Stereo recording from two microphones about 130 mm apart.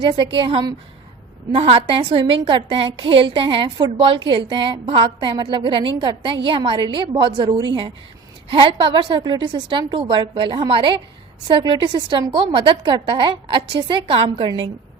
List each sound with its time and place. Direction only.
0.0 s a woman's voice: 40° right (ahead or behind)